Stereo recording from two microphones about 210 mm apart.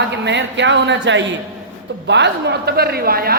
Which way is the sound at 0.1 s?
55° right (ahead or behind).